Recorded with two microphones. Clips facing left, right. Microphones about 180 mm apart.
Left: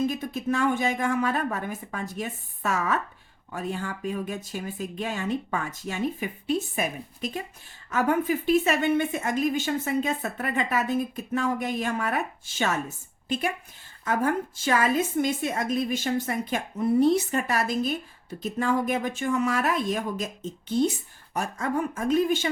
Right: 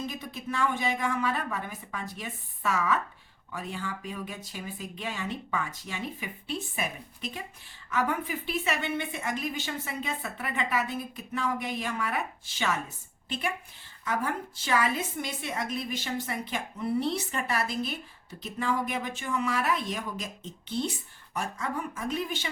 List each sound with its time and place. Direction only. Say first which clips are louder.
0.0 s a woman's voice: left 9 dB; 50° left (ahead or behind)